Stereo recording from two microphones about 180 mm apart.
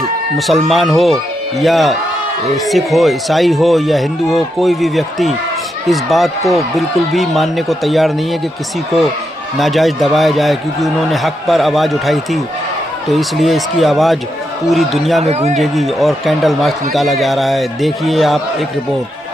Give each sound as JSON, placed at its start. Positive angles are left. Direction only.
{"t": 0.3, "sound": "a man's voice", "side_deg": 0}
{"t": 9.6, "sound": "a man's voice", "side_deg": 0}
{"t": 15.2, "sound": "a man's voice", "side_deg": -35}
{"t": 15.5, "sound": "a man's voice", "side_deg": 0}